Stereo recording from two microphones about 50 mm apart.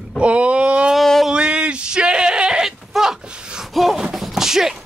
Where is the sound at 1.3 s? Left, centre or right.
Centre.